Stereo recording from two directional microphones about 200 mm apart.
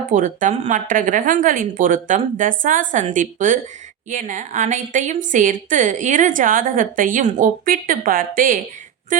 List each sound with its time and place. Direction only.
0.1 s a woman's voice: 40° right (ahead or behind)